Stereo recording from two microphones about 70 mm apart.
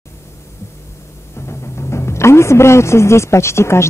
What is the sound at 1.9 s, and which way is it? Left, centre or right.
A man's voice, left.